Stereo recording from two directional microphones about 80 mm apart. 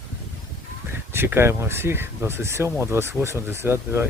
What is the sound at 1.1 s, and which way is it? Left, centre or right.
Speech, right.